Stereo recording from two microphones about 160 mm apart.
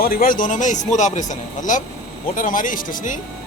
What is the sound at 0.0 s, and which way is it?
Speech, 65° left (ahead or behind).